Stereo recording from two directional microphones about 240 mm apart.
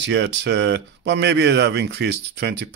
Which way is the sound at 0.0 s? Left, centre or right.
Right.